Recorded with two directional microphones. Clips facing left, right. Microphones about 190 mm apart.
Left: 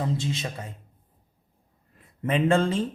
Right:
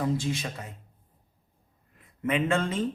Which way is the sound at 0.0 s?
25° left (ahead or behind).